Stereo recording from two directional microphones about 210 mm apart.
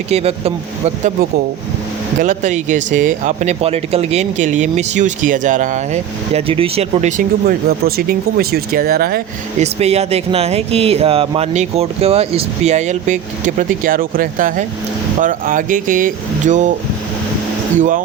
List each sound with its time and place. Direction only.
0.1 s speech: 30° right (ahead or behind)
2.2 s speech: 35° right (ahead or behind)
9.8 s speech: 30° right (ahead or behind)
17.7 s speech: 40° right (ahead or behind)